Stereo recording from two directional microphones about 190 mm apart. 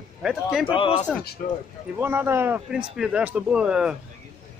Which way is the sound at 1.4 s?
45° left (ahead or behind).